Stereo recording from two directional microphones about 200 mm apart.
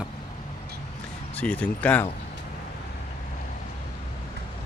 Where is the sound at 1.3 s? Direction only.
5° left (ahead or behind).